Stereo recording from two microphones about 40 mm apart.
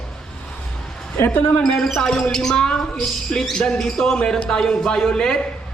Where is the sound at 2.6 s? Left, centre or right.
Left.